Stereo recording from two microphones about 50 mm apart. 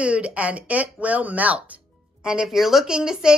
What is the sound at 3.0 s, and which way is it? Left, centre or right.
Speech, centre.